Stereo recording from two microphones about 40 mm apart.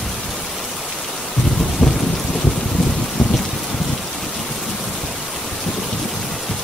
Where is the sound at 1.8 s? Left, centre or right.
Centre.